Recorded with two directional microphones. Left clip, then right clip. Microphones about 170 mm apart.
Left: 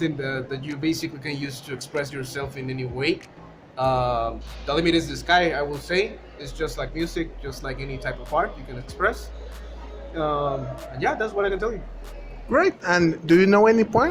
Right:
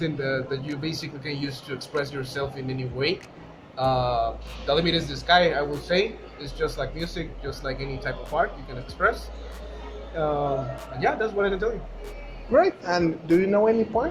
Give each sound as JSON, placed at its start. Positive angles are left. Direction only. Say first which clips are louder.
{"t": 0.0, "sound": "speech", "louder": "even", "side_deg": 35}
{"t": 10.2, "sound": "speech", "louder": "left 1 dB", "side_deg": 35}